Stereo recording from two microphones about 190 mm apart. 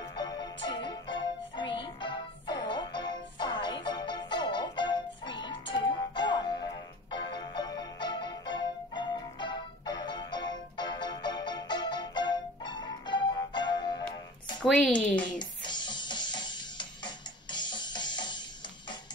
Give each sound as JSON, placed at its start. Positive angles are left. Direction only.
{"t": 0.1, "sound": "music", "side_deg": 20}
{"t": 14.6, "sound": "a woman's voice", "side_deg": 5}
{"t": 15.3, "sound": "music", "side_deg": 25}